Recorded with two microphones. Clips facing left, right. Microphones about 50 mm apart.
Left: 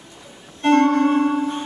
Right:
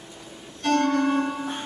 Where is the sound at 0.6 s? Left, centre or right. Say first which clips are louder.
Left 6 dB; left.